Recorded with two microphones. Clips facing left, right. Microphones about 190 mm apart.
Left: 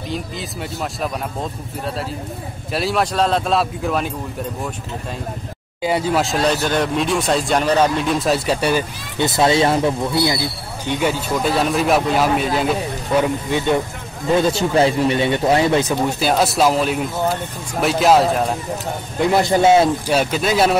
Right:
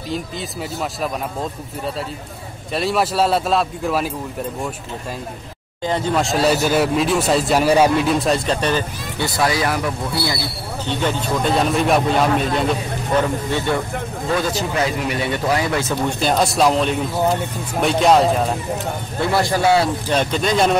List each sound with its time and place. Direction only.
0.1 s speech: centre (ahead or behind)
2.7 s speech: centre (ahead or behind)
5.8 s speech: 10° left (ahead or behind)
9.2 s speech: 25° left (ahead or behind); by 13.2 s 5° left (ahead or behind)
13.2 s speech: 15° left (ahead or behind)
14.3 s a man's voice: 25° left (ahead or behind)
15.9 s speech: 5° left (ahead or behind)
19.1 s a man's voice: 20° left (ahead or behind)
20.1 s speech: 5° left (ahead or behind)